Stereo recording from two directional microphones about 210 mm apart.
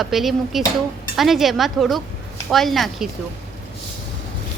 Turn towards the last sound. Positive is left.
turn(degrees=0)  # may be behind; listen again after turning